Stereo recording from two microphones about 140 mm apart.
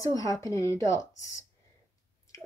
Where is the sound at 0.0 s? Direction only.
25° left (ahead or behind).